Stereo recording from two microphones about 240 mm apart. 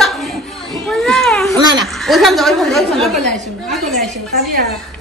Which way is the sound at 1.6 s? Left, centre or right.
Centre.